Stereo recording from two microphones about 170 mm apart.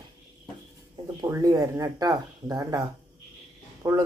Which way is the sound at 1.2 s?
20° right (ahead or behind).